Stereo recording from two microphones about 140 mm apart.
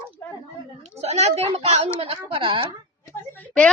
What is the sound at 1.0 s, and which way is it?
A woman's voice, 50° right (ahead or behind).